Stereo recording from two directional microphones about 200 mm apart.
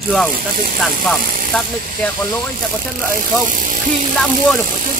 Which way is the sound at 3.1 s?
40° right (ahead or behind).